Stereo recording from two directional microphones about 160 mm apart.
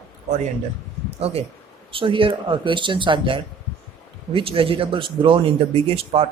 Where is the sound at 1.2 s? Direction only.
40° right (ahead or behind).